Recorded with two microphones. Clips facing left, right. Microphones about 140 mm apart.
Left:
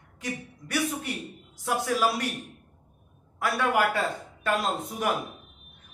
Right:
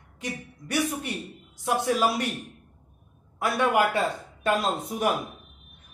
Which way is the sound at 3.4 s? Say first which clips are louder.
Right 2 dB; 20° right (ahead or behind).